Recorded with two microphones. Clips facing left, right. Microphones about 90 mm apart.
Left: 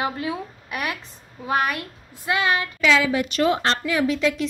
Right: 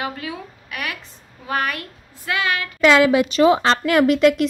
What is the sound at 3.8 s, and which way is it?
Speech, 70° right (ahead or behind).